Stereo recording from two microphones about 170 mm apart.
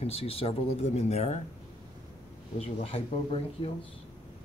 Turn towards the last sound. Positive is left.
turn(degrees=35)  # may be behind; listen again after turning